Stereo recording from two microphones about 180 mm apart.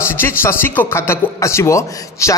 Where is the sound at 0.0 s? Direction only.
15° left (ahead or behind).